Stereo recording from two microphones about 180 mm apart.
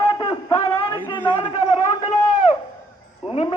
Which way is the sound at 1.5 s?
35° left (ahead or behind).